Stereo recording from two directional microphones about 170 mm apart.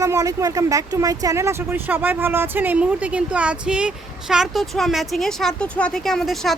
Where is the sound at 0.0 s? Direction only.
20° right (ahead or behind).